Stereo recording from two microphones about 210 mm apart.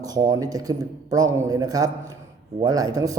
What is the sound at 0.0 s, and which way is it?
Speech, 15° right (ahead or behind).